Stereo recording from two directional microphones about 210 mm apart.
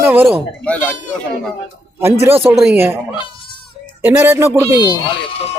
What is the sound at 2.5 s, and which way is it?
Speech, 5° right (ahead or behind).